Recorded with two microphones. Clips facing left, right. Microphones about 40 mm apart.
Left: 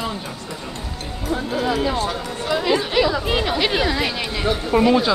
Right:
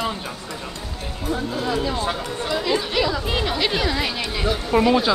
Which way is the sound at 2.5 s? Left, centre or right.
Centre.